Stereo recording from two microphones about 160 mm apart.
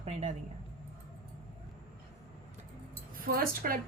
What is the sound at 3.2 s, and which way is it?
Speech, 65° right (ahead or behind).